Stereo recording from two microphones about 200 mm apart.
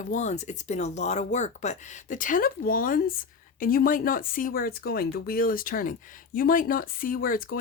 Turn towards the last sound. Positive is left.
turn(degrees=45)  # may be behind; listen again after turning